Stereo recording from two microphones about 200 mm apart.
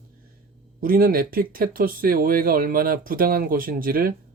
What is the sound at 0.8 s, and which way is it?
Speech, 45° right (ahead or behind).